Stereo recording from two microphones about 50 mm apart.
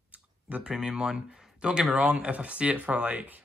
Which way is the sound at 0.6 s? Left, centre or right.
Centre.